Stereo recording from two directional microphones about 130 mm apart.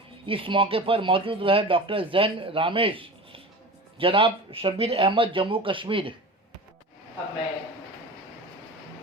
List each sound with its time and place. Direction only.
0.3 s speech: 40° right (ahead or behind)